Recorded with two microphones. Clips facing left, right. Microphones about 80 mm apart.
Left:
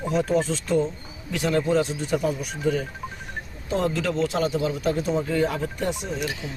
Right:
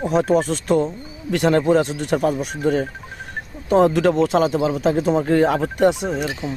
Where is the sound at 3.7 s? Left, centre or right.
Right.